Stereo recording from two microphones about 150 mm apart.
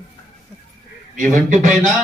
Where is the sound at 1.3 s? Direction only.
55° right (ahead or behind).